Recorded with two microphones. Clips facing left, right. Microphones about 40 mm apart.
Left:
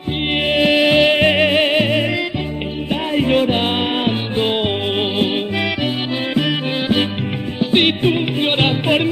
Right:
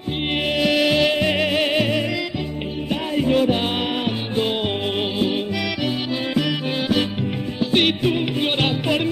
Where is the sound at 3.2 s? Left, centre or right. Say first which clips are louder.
Left 2 dB; left.